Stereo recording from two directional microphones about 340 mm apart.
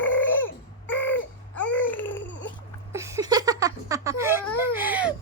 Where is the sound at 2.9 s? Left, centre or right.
Centre.